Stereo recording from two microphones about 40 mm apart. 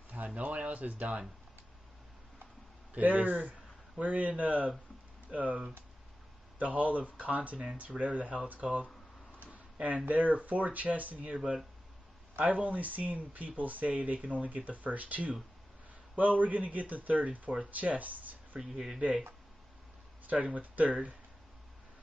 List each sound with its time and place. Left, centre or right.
0.4 s speech: right
2.9 s speech: right
6.6 s speech: right
12.4 s speech: right
18.6 s speech: centre
18.9 s speech: right
20.2 s speech: right